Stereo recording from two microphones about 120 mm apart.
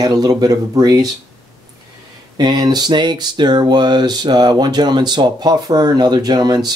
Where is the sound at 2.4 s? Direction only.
35° right (ahead or behind).